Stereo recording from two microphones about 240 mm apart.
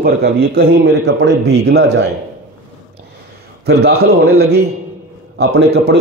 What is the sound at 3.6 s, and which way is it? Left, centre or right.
A man's voice, right.